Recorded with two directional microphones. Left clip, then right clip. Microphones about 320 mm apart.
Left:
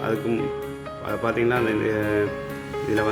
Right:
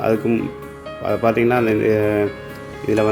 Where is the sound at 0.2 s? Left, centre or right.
Centre.